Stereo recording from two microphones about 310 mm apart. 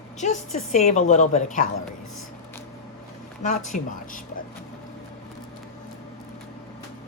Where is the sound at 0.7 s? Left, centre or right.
Left.